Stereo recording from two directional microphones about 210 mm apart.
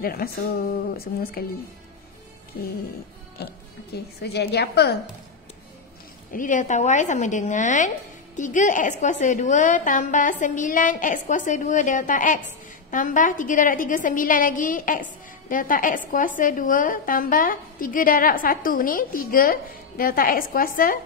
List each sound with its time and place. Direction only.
0.0 s a woman's voice: 45° left (ahead or behind)
3.4 s a woman's voice: 50° left (ahead or behind)
6.3 s a woman's voice: 40° left (ahead or behind)